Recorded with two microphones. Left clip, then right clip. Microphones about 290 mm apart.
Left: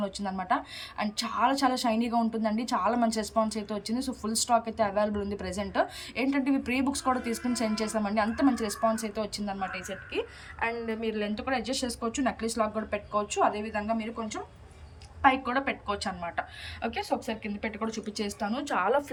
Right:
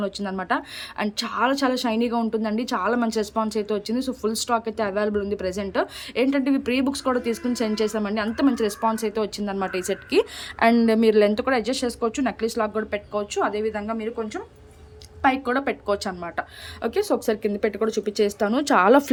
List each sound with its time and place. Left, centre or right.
0.0 s a woman's voice: centre
11.1 s a woman's voice: centre
15.2 s a woman's voice: centre